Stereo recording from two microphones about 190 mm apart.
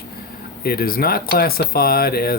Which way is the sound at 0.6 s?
55° left (ahead or behind).